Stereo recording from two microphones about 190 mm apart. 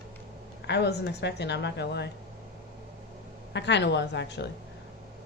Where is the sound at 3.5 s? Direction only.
65° left (ahead or behind).